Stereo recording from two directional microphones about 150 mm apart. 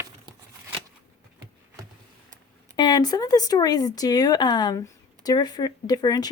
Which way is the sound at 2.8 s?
25° left (ahead or behind).